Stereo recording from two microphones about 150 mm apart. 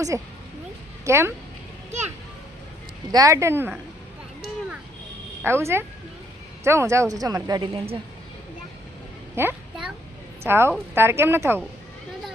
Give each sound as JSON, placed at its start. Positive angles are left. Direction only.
{"t": 0.1, "sound": "a woman's voice", "side_deg": -15}
{"t": 3.1, "sound": "speech", "side_deg": -25}
{"t": 5.4, "sound": "a woman's voice", "side_deg": -15}
{"t": 9.3, "sound": "a child's voice", "side_deg": -15}